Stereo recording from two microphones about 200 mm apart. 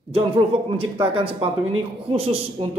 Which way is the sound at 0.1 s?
25° right (ahead or behind).